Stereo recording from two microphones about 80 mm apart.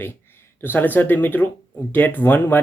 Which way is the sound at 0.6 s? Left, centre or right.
Left.